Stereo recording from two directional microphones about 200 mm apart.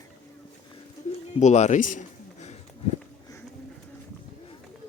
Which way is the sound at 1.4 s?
35° left (ahead or behind).